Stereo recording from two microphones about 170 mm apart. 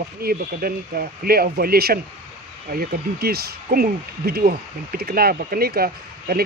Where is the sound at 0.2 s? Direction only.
60° right (ahead or behind).